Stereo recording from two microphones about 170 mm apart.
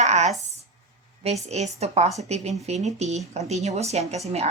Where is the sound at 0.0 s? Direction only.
40° right (ahead or behind).